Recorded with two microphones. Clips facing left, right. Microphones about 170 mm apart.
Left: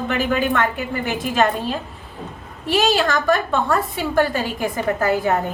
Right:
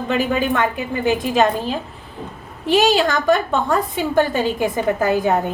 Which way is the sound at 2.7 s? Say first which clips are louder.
Right 3 dB; 20° right (ahead or behind).